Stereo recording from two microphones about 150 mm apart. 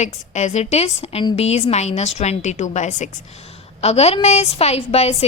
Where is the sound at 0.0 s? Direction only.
50° left (ahead or behind).